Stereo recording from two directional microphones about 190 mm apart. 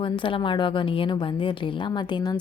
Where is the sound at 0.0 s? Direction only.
25° left (ahead or behind).